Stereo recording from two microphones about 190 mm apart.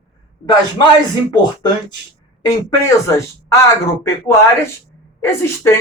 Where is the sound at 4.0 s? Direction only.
15° left (ahead or behind).